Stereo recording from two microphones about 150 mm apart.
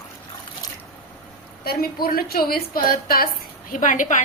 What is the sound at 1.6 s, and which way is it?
A woman's voice, 85° left.